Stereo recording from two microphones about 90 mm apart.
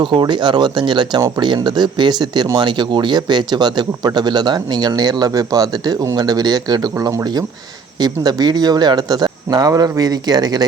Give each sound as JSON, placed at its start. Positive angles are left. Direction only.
{"t": 0.0, "sound": "speech", "side_deg": -60}
{"t": 6.9, "sound": "speech", "side_deg": -30}
{"t": 7.9, "sound": "speech", "side_deg": -50}